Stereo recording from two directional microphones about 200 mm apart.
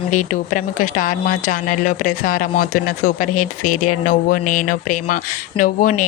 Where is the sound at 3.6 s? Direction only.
45° left (ahead or behind).